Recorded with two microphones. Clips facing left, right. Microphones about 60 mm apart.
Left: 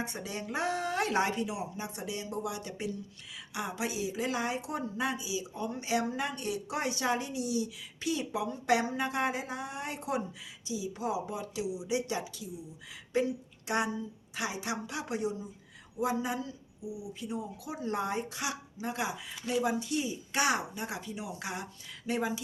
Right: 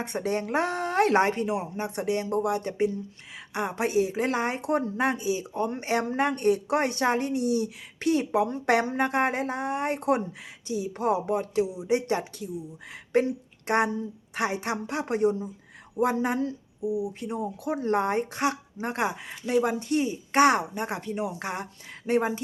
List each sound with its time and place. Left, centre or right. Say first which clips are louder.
0.0 s speech: right 9 dB; right